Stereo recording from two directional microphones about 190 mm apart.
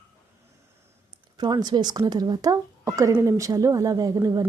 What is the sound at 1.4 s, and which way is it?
Speech, 20° right (ahead or behind).